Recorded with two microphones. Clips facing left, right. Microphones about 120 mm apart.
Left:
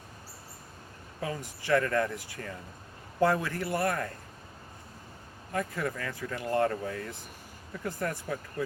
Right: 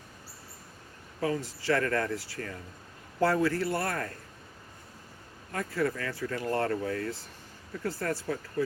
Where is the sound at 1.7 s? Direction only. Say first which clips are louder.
Left 1 dB; 15° left (ahead or behind).